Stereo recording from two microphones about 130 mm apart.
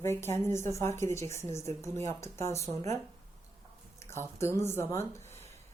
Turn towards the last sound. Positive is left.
turn(degrees=20)  # may be behind; listen again after turning